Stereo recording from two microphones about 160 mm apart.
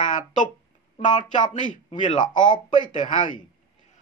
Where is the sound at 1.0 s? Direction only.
30° left (ahead or behind).